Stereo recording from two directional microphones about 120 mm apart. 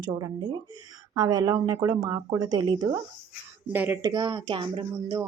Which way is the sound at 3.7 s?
15° right (ahead or behind).